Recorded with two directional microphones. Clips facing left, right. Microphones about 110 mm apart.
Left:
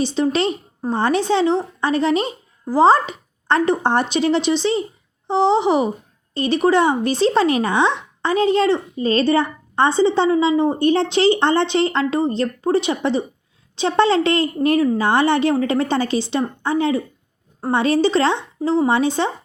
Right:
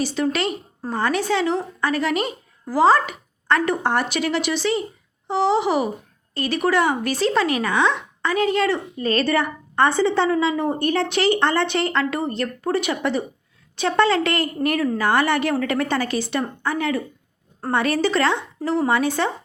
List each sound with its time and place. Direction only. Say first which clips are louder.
0.0 s speech: left 4 dB; 25° left (ahead or behind)